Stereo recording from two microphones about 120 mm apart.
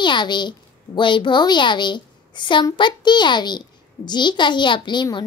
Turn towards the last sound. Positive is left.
turn(degrees=40)  # may be behind; listen again after turning